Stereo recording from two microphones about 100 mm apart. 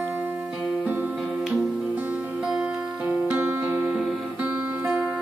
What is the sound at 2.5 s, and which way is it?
Music, 10° right (ahead or behind).